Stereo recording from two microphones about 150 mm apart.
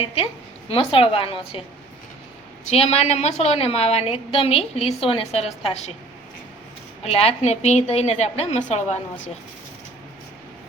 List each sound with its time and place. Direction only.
0.0 s a woman's voice: 40° left (ahead or behind)
2.6 s a woman's voice: 45° left (ahead or behind)
7.0 s a woman's voice: 40° left (ahead or behind)